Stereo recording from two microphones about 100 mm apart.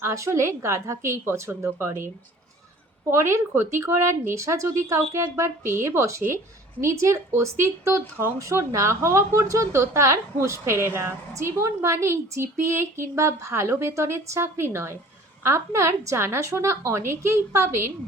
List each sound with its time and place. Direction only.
0.0 s speech: 30° right (ahead or behind)
3.1 s speech: 25° right (ahead or behind)